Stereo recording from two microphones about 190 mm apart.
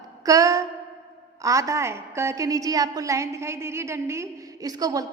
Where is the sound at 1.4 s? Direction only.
15° right (ahead or behind).